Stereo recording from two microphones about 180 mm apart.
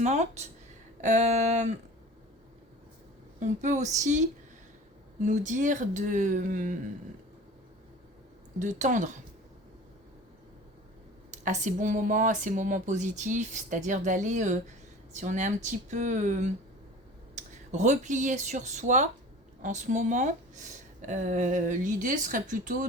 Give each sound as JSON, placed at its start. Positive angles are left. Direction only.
{"t": 0.0, "sound": "speech", "side_deg": -40}
{"t": 3.4, "sound": "speech", "side_deg": -40}
{"t": 8.5, "sound": "speech", "side_deg": -45}
{"t": 11.3, "sound": "speech", "side_deg": -40}